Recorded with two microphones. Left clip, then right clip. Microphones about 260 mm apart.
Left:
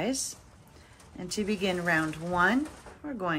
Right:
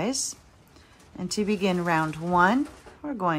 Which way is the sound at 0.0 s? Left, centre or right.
Right.